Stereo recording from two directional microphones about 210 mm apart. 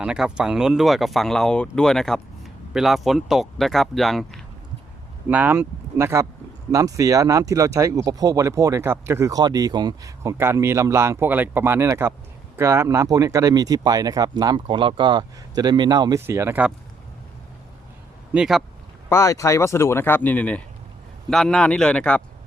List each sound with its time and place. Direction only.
0.0 s speech: 5° right (ahead or behind)
18.3 s speech: centre (ahead or behind)
19.0 s speech: 15° left (ahead or behind)